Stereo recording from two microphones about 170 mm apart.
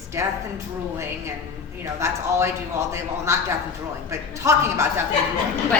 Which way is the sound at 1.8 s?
15° right (ahead or behind).